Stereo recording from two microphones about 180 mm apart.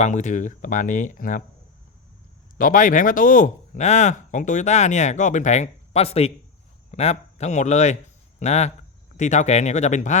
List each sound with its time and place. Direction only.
0.0 s speech: 40° left (ahead or behind)
2.6 s speech: 50° left (ahead or behind)